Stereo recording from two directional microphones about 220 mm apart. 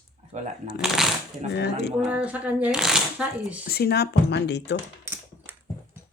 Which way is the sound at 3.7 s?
45° left (ahead or behind).